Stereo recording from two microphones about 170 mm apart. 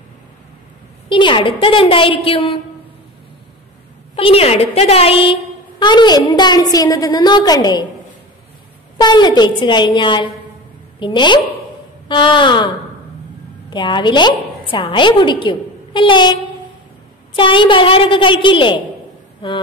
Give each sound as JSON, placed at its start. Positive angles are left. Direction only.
{"t": 1.0, "sound": "a woman's voice", "side_deg": 30}
{"t": 4.1, "sound": "a woman's voice", "side_deg": 35}
{"t": 9.0, "sound": "a woman's voice", "side_deg": 25}
{"t": 17.4, "sound": "a woman's voice", "side_deg": 30}